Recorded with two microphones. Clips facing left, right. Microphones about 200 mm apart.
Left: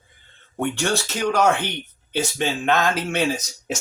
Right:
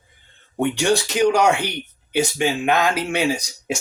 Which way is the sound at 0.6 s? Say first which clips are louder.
Right 4 dB; 15° right (ahead or behind).